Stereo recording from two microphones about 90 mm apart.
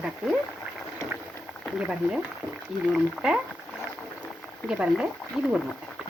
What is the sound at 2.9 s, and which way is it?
Speech, 10° right (ahead or behind).